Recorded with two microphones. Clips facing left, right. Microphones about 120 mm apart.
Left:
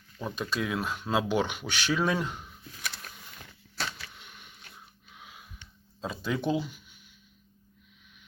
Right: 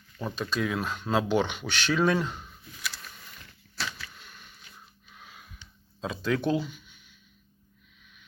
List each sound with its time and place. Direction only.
0.2 s speech: 10° left (ahead or behind)
4.1 s a sound: 15° left (ahead or behind)
6.0 s speech: 5° left (ahead or behind)